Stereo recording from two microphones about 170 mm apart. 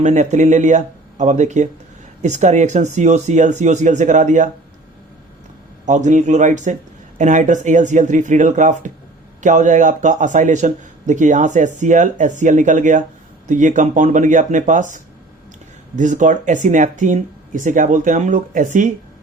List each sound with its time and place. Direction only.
0.0 s speech: 45° right (ahead or behind)
5.8 s speech: 45° right (ahead or behind)